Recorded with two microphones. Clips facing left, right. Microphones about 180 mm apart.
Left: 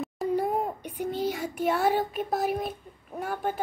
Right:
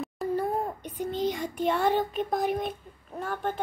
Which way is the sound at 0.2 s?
15° left (ahead or behind).